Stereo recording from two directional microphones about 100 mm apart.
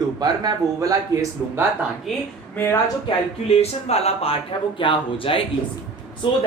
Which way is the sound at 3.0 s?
85° left.